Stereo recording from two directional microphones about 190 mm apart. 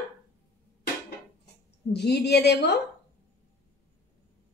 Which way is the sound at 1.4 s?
60° left (ahead or behind).